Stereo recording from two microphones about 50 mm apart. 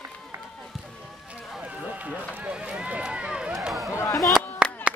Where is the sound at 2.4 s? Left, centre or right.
Right.